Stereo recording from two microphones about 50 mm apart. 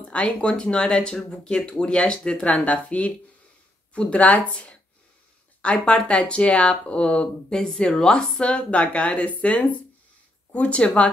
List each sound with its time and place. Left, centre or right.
0.1 s speech: left
7.5 s speech: centre; by 11.1 s left